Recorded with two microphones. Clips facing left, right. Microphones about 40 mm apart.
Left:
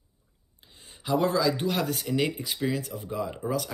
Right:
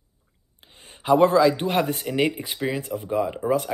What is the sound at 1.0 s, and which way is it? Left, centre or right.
Speech, right.